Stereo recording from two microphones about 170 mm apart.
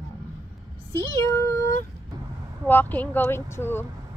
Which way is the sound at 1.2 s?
15° left (ahead or behind).